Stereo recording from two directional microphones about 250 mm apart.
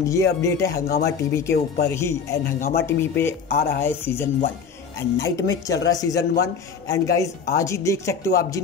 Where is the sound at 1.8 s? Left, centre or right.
Centre.